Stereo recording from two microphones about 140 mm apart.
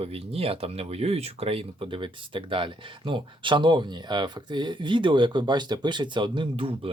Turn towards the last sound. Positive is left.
turn(degrees=-40)  # may be behind; listen again after turning